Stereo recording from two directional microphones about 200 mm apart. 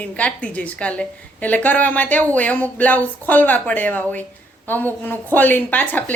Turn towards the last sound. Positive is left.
turn(degrees=10)  # may be behind; listen again after turning